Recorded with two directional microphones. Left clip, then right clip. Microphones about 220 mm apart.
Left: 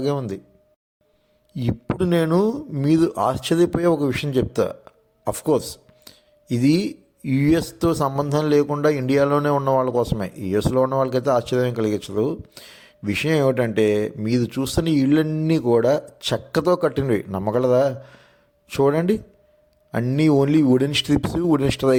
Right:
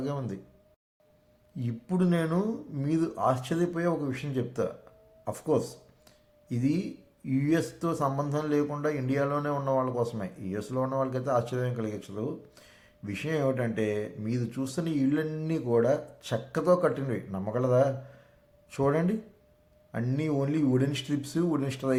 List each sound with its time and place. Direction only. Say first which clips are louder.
0.0 s speech: left 11 dB; 35° left (ahead or behind)
1.5 s speech: left 8 dB; 45° left (ahead or behind)
6.1 s a sound: left 12 dB; 45° left (ahead or behind)
7.3 s speech: left 8 dB; 45° left (ahead or behind)